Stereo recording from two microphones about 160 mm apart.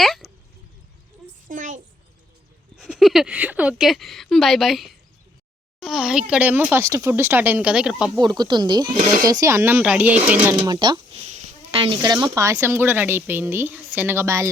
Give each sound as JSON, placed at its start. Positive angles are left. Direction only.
{"t": 0.0, "sound": "speech", "side_deg": 0}
{"t": 1.5, "sound": "a sound", "side_deg": -55}
{"t": 2.7, "sound": "a woman's voice", "side_deg": 0}
{"t": 8.2, "sound": "a woman's voice", "side_deg": -25}
{"t": 10.6, "sound": "a woman's voice", "side_deg": -25}